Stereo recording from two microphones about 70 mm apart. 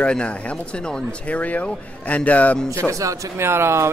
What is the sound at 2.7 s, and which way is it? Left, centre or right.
Speech, right.